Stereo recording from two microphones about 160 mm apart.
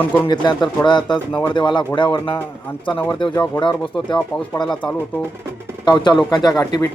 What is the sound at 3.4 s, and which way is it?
Speech, 30° left (ahead or behind).